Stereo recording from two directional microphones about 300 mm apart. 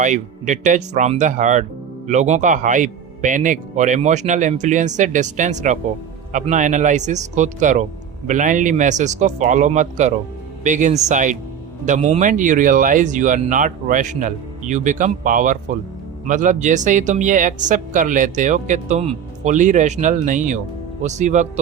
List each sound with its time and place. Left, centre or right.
0.0 s speech: right